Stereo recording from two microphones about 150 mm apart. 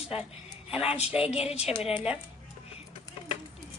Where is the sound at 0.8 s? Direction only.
45° left (ahead or behind).